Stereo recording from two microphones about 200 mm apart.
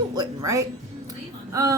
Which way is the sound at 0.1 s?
20° right (ahead or behind).